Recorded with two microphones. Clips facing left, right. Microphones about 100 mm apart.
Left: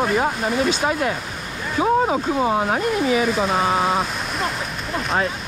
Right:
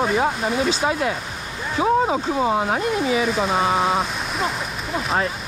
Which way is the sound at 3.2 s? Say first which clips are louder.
Left 1 dB; centre (ahead or behind).